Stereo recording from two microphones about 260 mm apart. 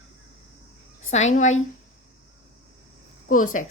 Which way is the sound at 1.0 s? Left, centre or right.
Left.